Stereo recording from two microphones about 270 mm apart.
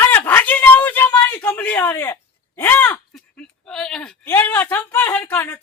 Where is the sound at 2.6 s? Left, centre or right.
Centre.